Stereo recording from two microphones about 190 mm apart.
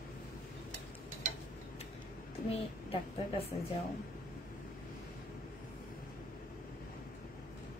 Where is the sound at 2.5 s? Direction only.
30° left (ahead or behind).